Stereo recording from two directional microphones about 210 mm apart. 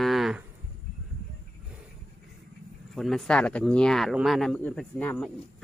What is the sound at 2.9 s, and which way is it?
Speech, centre (ahead or behind).